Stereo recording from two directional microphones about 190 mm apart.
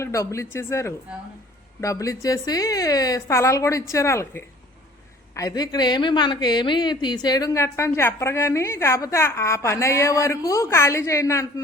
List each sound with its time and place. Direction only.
0.0 s a woman's voice: 15° left (ahead or behind)